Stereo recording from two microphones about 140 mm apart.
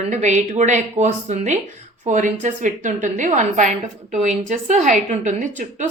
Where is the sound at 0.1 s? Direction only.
55° right (ahead or behind).